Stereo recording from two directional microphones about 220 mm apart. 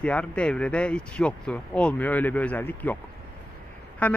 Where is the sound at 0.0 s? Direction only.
5° left (ahead or behind).